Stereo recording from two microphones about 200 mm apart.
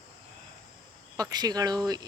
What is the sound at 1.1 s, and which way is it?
Speech, 20° right (ahead or behind).